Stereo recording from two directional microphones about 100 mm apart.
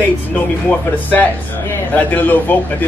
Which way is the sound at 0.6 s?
15° left (ahead or behind).